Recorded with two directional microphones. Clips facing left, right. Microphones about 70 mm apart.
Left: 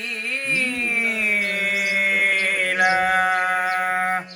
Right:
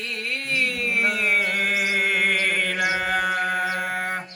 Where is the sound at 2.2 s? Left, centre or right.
Centre.